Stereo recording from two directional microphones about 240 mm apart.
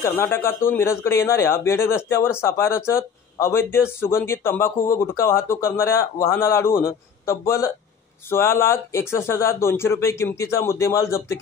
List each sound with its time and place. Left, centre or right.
0.0 s speech: centre